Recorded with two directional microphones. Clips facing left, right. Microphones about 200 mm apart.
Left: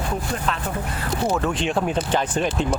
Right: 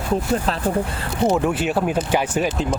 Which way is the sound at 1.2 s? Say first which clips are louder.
Right 5 dB; 20° right (ahead or behind).